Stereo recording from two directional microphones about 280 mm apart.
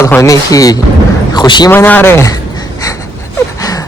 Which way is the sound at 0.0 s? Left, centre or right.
Centre.